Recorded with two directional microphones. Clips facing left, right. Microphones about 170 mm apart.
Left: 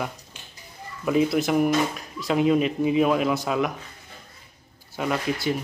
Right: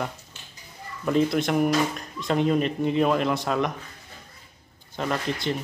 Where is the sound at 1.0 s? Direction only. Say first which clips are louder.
Left 1 dB; 5° left (ahead or behind).